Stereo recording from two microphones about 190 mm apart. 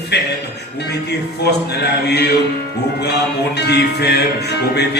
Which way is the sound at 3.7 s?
60° left (ahead or behind).